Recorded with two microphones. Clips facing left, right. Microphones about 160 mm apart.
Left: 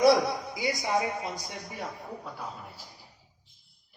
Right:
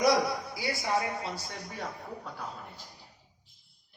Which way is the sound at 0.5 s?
20° left (ahead or behind).